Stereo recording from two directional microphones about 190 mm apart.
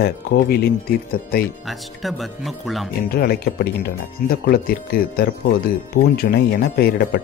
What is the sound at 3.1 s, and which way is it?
Speech, 55° left (ahead or behind).